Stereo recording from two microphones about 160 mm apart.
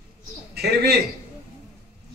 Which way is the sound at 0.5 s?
90° right.